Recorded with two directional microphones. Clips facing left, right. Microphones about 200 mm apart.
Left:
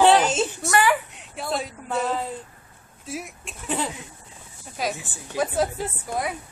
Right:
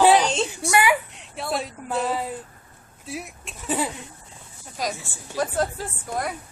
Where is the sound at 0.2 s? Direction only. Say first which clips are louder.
Left 1 dB; 5° left (ahead or behind).